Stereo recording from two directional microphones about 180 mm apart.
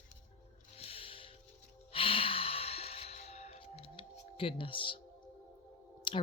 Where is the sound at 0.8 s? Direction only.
30° left (ahead or behind).